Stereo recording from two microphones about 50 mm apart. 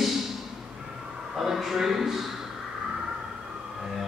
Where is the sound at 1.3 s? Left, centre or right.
Centre.